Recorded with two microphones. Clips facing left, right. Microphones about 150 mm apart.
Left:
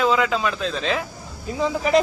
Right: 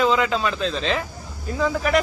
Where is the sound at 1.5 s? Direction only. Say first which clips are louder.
Left 1 dB; 20° left (ahead or behind).